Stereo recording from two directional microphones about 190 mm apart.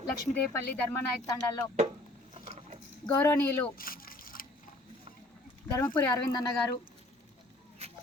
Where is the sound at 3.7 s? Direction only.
50° left (ahead or behind).